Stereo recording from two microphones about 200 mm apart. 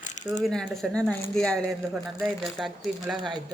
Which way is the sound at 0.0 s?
40° left (ahead or behind).